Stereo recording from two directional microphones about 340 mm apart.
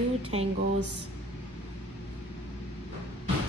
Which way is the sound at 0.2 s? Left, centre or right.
Centre.